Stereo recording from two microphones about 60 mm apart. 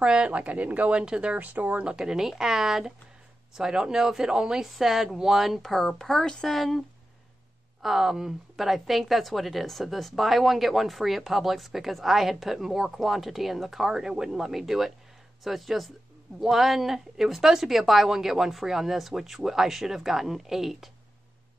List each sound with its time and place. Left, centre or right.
0.0 s a woman's voice: centre
1.9 s a woman's voice: centre
7.8 s speech: centre